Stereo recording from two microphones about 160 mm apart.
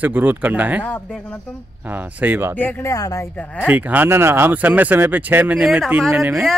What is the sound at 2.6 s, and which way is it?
Speech, 15° left (ahead or behind).